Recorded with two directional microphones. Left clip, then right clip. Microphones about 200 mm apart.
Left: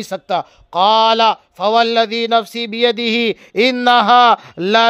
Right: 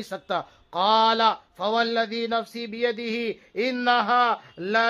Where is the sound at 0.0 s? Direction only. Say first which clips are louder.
Left 9 dB; 30° left (ahead or behind).